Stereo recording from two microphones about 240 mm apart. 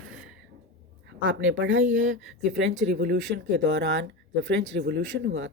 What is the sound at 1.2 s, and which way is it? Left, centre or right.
Speech, right.